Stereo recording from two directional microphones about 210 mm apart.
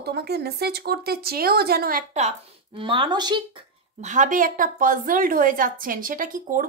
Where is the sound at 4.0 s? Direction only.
35° right (ahead or behind).